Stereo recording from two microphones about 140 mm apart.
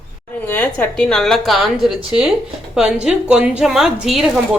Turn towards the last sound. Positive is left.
turn(degrees=0)  # may be behind; listen again after turning